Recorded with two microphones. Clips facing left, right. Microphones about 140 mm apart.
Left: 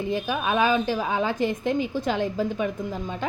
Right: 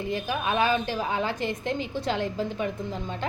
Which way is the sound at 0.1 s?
15° left (ahead or behind).